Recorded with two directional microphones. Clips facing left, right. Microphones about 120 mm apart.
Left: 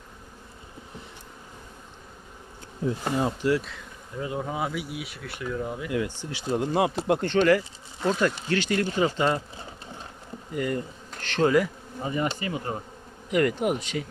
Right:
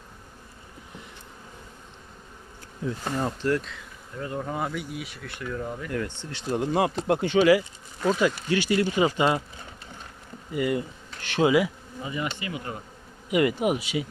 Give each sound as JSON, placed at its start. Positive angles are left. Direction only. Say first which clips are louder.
{"t": 3.0, "sound": "speech", "louder": "left 1 dB", "side_deg": 10}
{"t": 6.5, "sound": "speech", "louder": "even", "side_deg": 0}
{"t": 8.4, "sound": "speech", "louder": "right 2 dB", "side_deg": -10}
{"t": 10.5, "sound": "speech", "louder": "right 2 dB", "side_deg": -10}
{"t": 12.0, "sound": "speech", "louder": "left 4 dB", "side_deg": 40}
{"t": 13.3, "sound": "speech", "louder": "right 1 dB", "side_deg": -5}